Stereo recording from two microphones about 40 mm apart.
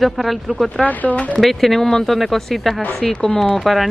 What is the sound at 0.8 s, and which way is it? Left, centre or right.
Speech, left.